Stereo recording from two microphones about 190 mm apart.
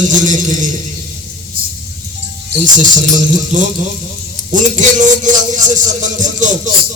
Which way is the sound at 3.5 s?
40° right (ahead or behind).